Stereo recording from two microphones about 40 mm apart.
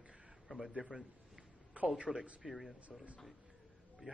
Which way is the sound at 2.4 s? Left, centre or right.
Centre.